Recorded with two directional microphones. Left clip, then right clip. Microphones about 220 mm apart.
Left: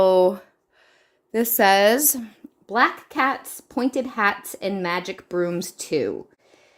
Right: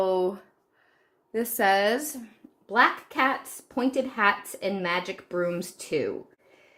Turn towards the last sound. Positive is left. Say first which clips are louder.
# left 4 dB
turn(degrees=45)  # may be behind; listen again after turning